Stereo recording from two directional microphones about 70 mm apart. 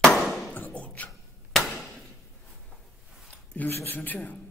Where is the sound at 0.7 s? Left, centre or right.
Left.